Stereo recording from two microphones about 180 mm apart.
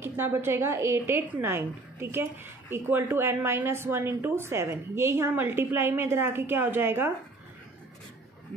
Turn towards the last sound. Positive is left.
turn(degrees=-10)  # may be behind; listen again after turning